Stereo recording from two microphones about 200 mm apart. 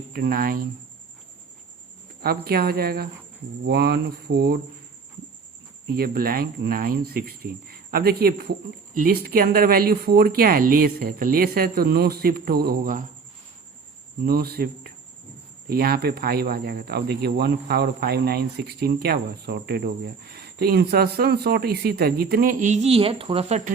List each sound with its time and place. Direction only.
0.1 s speech: 50° right (ahead or behind)
2.2 s speech: 50° right (ahead or behind)
5.9 s speech: 50° right (ahead or behind)
14.3 s speech: 50° right (ahead or behind); by 23.7 s 35° right (ahead or behind)